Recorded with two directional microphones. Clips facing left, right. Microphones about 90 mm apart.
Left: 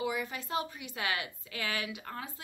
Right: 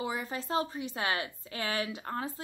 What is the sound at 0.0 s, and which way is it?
A woman's voice, 35° right (ahead or behind).